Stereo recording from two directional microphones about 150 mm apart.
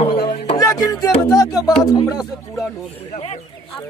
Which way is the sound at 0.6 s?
20° left (ahead or behind).